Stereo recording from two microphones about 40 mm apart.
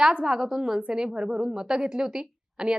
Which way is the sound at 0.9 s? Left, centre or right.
Centre.